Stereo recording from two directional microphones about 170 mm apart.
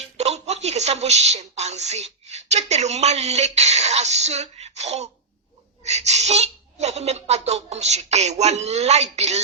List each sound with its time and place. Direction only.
0.2 s a woman's voice: 40° right (ahead or behind)